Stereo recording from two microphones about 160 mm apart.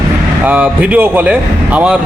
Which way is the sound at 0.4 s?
10° right (ahead or behind).